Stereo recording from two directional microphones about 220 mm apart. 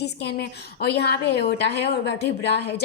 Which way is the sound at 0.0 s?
50° left (ahead or behind).